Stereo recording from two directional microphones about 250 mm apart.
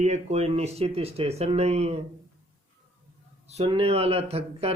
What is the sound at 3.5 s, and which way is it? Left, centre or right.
Speech, right.